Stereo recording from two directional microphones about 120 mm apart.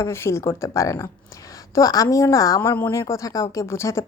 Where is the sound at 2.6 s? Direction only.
15° left (ahead or behind).